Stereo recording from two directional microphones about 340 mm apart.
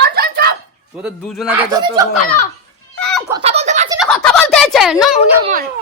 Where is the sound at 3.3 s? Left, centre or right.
Centre.